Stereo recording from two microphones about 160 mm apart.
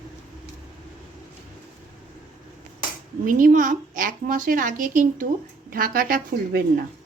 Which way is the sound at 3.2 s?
60° right (ahead or behind).